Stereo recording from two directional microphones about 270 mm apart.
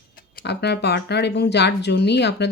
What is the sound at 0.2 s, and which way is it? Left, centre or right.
Speech, left.